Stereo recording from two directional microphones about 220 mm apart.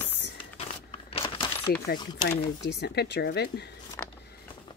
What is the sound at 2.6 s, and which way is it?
Speech, 50° left (ahead or behind).